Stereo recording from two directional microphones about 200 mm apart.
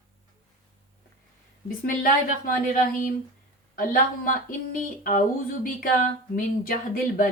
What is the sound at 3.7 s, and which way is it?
Speech, 45° left (ahead or behind).